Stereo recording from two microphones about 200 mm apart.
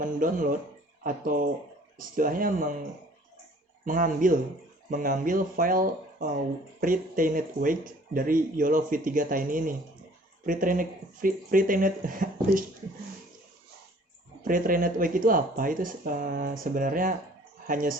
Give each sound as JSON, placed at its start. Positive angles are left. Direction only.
{"t": 0.0, "sound": "speech", "side_deg": -40}
{"t": 3.8, "sound": "speech", "side_deg": -40}
{"t": 14.4, "sound": "speech", "side_deg": -45}